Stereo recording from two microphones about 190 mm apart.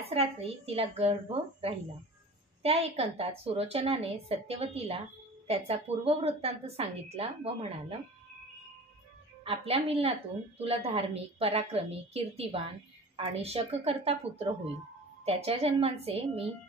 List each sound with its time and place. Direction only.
0.0 s a woman's voice: 30° right (ahead or behind)
9.4 s a woman's voice: 30° right (ahead or behind)